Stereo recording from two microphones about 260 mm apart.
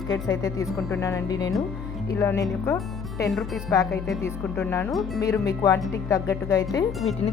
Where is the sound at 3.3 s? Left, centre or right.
Centre.